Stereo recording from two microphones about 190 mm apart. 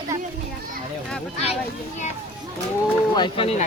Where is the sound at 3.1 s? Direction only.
25° left (ahead or behind).